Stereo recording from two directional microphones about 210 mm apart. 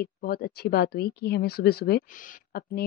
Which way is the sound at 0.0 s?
45° left (ahead or behind).